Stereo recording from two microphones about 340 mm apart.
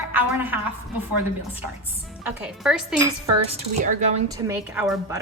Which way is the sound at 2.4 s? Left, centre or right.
Centre.